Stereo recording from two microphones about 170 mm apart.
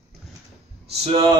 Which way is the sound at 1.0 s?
30° right (ahead or behind).